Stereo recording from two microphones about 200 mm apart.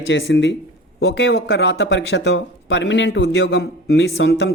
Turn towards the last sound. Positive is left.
turn(degrees=60)  # may be behind; listen again after turning